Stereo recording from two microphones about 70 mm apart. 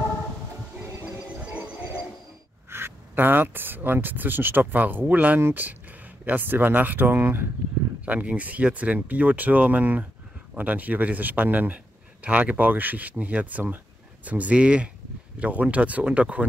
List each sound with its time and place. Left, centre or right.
2.7 s speech: right
8.0 s speech: right